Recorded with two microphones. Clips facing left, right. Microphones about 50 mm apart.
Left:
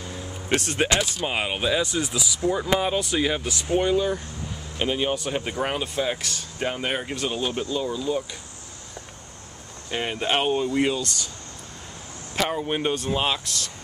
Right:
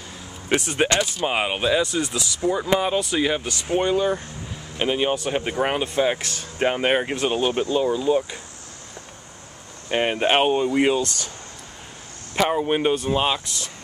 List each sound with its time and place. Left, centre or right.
0.5 s speech: centre
9.8 s speech: right
12.4 s speech: centre